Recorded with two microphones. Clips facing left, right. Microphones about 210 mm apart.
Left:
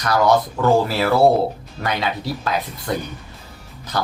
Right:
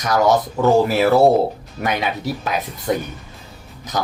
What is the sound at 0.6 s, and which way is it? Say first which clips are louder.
Speech: right 3 dB; 15° right (ahead or behind).